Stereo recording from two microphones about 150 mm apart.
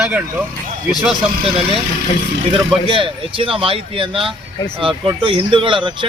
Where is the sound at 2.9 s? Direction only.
35° right (ahead or behind).